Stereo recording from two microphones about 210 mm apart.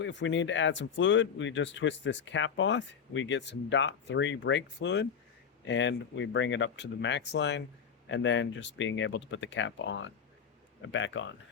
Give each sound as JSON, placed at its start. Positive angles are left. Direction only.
{"t": 0.0, "sound": "speech", "side_deg": 60}